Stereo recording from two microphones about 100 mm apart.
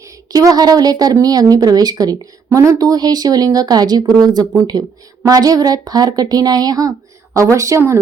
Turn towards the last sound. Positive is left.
turn(degrees=-30)  # may be behind; listen again after turning